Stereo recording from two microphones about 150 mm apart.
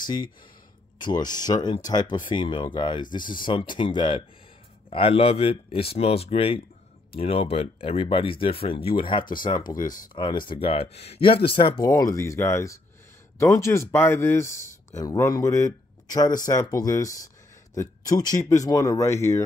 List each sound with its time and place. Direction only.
0.0 s speech: 30° left (ahead or behind)
10.5 s speech: 40° left (ahead or behind)
11.8 s speech: 25° left (ahead or behind)